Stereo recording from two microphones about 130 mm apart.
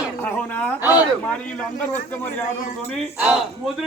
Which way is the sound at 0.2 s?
15° left (ahead or behind).